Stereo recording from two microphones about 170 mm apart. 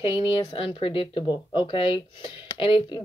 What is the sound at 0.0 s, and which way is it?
Speech, 30° left (ahead or behind).